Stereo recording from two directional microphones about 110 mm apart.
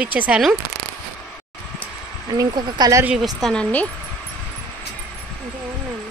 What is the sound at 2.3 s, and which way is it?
Speech, 35° right (ahead or behind).